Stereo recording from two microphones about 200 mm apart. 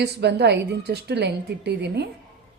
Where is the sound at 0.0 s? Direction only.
55° right (ahead or behind).